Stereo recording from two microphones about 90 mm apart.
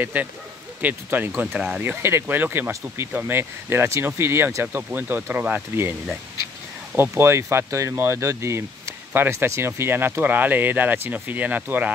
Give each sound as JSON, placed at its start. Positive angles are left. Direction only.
{"t": 0.0, "sound": "speech", "side_deg": -20}
{"t": 1.8, "sound": "speech", "side_deg": -25}
{"t": 7.0, "sound": "speech", "side_deg": -30}